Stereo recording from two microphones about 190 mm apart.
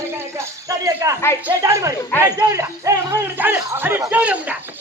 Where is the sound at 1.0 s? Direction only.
15° right (ahead or behind).